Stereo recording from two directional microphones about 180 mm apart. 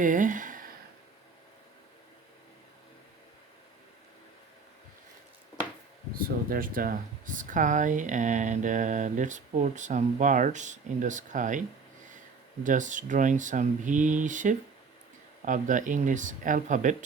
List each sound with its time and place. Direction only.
0.0 s a sound: 45° right (ahead or behind)
6.1 s speech: 55° right (ahead or behind)
12.6 s speech: 45° right (ahead or behind)